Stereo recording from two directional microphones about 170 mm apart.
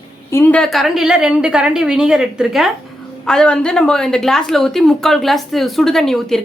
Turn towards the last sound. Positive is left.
turn(degrees=0)  # may be behind; listen again after turning